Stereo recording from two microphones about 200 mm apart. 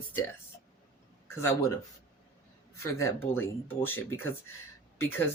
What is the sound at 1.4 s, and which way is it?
Speech, 15° left (ahead or behind).